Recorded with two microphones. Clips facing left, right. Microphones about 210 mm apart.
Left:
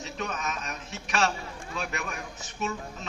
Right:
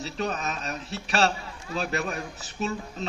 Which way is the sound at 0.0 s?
35° right (ahead or behind).